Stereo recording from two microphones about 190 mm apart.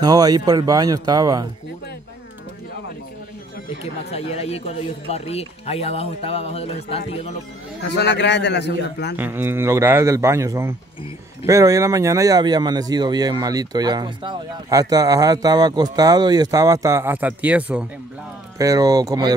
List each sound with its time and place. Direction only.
0.0 s speech: 20° right (ahead or behind)
3.8 s a man's voice: 35° left (ahead or behind)
7.8 s a man's voice: 65° left (ahead or behind)
9.1 s speech: 10° right (ahead or behind)
18.6 s speech: 20° right (ahead or behind)